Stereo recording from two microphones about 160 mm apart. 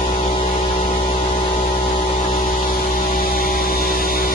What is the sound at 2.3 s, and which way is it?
Music, 65° left (ahead or behind).